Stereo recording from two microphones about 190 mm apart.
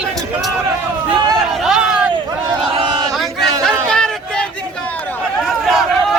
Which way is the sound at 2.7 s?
25° right (ahead or behind).